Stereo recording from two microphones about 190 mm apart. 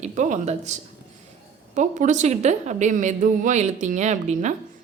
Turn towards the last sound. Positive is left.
turn(degrees=-40)  # may be behind; listen again after turning